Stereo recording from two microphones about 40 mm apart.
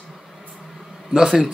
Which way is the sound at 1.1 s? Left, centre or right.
Centre.